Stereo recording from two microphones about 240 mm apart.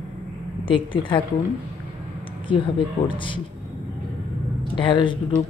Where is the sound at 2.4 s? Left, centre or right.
Left.